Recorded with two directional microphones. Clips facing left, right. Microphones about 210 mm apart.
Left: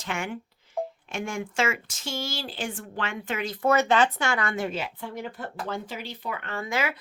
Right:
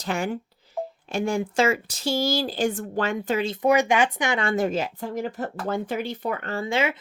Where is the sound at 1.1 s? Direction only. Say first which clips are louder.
Right 7 dB; 35° right (ahead or behind).